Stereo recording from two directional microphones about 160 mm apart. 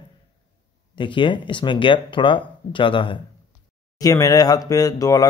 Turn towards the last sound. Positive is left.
turn(degrees=25)  # may be behind; listen again after turning